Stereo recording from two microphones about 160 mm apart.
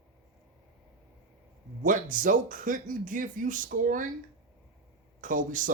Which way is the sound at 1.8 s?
55° right (ahead or behind).